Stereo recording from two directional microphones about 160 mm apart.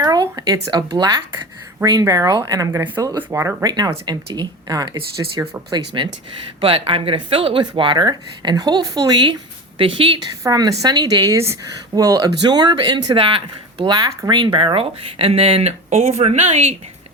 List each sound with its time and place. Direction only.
0.0 s speech: 25° right (ahead or behind)
10.4 s speech: 25° right (ahead or behind); by 16.7 s 40° right (ahead or behind)